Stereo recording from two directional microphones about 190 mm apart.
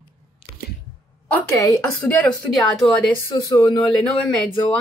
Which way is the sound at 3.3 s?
25° left (ahead or behind).